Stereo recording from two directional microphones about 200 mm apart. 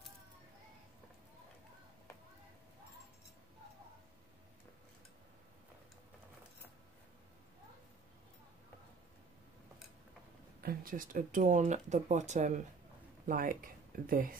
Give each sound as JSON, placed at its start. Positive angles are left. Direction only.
{"t": 10.6, "sound": "speech", "side_deg": -45}